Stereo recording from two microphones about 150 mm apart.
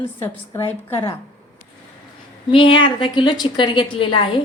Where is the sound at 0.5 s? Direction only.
15° left (ahead or behind).